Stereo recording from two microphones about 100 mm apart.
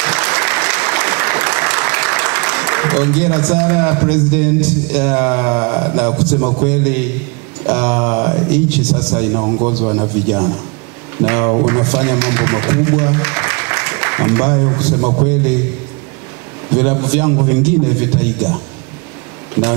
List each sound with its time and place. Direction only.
0.0 s applause: 10° right (ahead or behind)
6.6 s a man's voice: 10° right (ahead or behind)
9.3 s a man's voice: 30° right (ahead or behind); by 15.0 s 10° right (ahead or behind)
16.7 s a man's voice: 15° right (ahead or behind)